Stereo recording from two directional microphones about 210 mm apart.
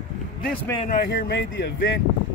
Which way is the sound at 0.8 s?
45° left (ahead or behind).